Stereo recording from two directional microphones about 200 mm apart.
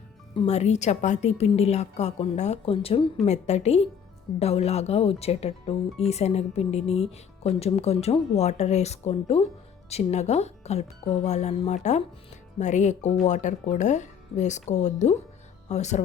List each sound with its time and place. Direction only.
0.3 s speech: 35° left (ahead or behind)